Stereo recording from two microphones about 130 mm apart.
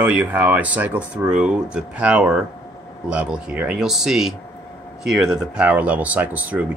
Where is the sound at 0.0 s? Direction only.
10° right (ahead or behind).